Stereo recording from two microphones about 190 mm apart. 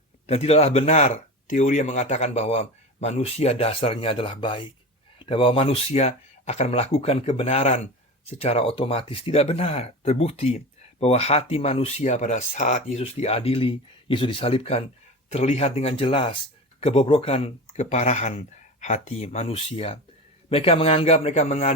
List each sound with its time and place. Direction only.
0.3 s speech: 35° left (ahead or behind)